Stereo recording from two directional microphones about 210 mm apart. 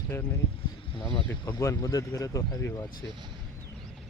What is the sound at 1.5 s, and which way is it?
Speech, 15° left (ahead or behind).